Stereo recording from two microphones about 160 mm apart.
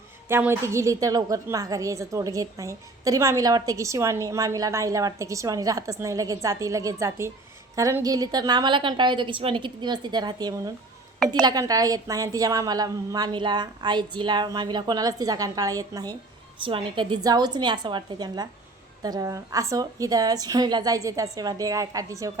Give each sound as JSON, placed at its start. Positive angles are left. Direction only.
{"t": 0.3, "sound": "a woman's voice", "side_deg": -15}